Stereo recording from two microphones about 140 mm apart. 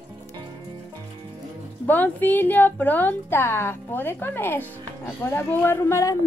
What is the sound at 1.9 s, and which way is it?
A woman's voice, 10° left (ahead or behind).